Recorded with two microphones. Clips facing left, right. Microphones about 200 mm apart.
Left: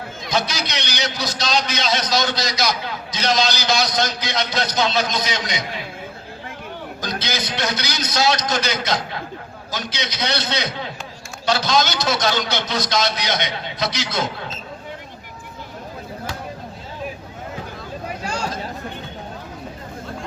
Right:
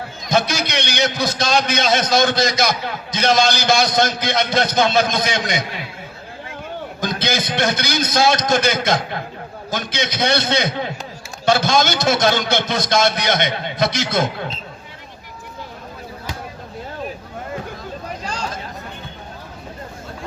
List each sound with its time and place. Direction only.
0.3 s a man's voice: 50° right (ahead or behind)
7.0 s a man's voice: 50° right (ahead or behind)
18.2 s a sound: 10° left (ahead or behind)